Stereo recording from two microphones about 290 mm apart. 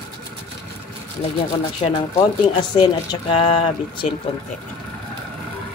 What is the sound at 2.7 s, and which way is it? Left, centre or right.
Speech, centre.